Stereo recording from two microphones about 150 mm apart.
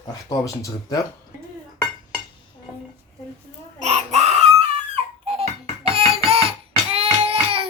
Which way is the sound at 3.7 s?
50° right (ahead or behind).